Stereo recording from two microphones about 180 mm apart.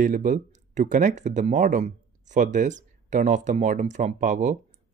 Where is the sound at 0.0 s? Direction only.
50° right (ahead or behind).